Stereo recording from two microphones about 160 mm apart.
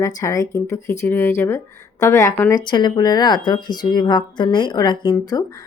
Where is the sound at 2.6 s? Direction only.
30° left (ahead or behind).